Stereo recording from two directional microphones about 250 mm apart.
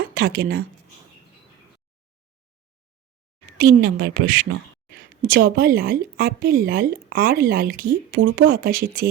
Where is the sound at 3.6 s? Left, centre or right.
Right.